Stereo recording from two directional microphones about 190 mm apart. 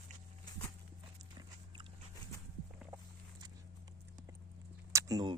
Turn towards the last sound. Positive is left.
turn(degrees=-20)  # may be behind; listen again after turning